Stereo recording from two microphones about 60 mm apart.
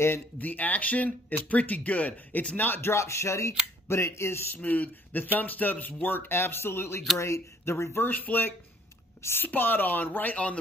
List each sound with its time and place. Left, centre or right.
0.4 s speech: left
4.6 s speech: left
7.2 s speech: left
8.1 s speech: left
10.3 s a man's voice: centre